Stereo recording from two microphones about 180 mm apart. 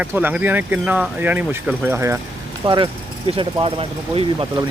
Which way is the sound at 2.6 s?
25° right (ahead or behind).